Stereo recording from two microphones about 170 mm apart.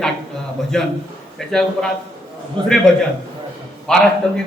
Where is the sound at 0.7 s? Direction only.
5° left (ahead or behind).